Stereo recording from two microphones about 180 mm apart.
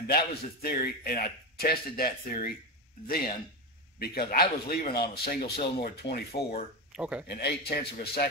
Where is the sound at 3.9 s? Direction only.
60° left (ahead or behind).